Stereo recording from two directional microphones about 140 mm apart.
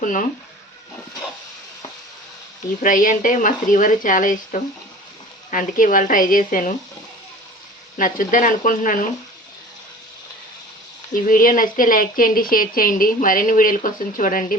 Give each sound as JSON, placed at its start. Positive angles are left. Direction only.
{"t": 0.0, "sound": "speech", "side_deg": 75}
{"t": 2.8, "sound": "speech", "side_deg": 75}
{"t": 7.9, "sound": "speech", "side_deg": 75}
{"t": 11.1, "sound": "speech", "side_deg": 85}